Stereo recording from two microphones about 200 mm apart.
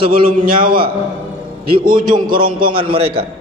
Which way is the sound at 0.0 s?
45° right (ahead or behind).